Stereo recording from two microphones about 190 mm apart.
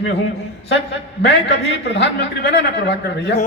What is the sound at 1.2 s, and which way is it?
A man's voice, 65° left (ahead or behind).